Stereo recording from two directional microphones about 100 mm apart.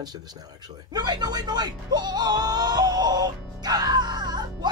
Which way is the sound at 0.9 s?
45° right (ahead or behind).